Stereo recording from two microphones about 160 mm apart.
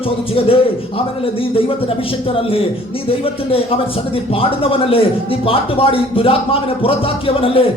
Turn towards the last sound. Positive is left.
turn(degrees=35)  # may be behind; listen again after turning